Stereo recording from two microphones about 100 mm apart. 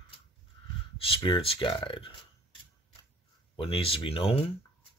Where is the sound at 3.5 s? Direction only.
65° left (ahead or behind).